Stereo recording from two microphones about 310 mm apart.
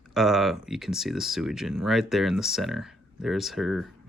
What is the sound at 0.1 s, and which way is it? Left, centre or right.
Speech, centre.